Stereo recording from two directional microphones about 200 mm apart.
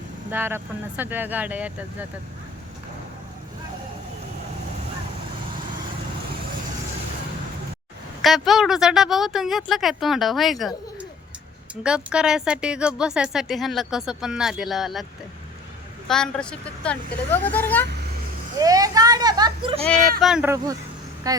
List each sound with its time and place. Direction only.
0.3 s speech: 10° right (ahead or behind)
8.2 s a woman's voice: centre (ahead or behind)
11.8 s a woman's voice: 5° right (ahead or behind)
16.0 s a woman's voice: 5° left (ahead or behind)
18.6 s speech: 20° right (ahead or behind)
19.8 s a woman's voice: centre (ahead or behind); by 21.4 s 15° right (ahead or behind)